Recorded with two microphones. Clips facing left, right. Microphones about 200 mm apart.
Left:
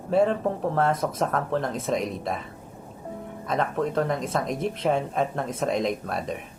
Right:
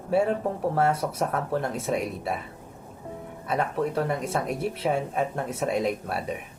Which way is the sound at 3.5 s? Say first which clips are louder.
Left 1 dB; 10° right (ahead or behind).